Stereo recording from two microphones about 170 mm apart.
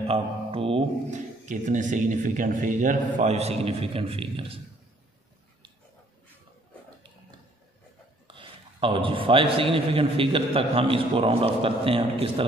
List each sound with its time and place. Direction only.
0.0 s speech: 35° right (ahead or behind)
1.1 s speech: 45° right (ahead or behind)
3.2 s a man's voice: 40° right (ahead or behind)
8.3 s a man's voice: 30° right (ahead or behind)